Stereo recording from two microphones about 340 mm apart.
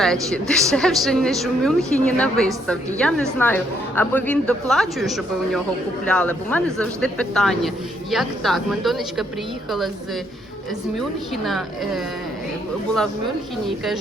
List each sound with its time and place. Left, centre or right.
0.0 s a woman's voice: centre
11.4 s a woman's voice: centre
13.7 s a woman's voice: centre